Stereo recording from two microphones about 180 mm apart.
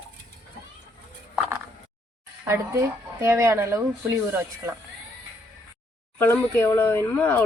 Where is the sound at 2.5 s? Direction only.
15° right (ahead or behind).